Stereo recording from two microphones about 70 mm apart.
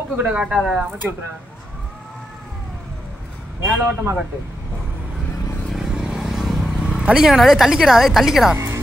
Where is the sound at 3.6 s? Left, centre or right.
Right.